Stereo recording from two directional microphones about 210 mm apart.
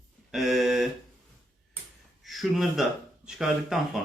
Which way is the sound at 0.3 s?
Centre (ahead or behind).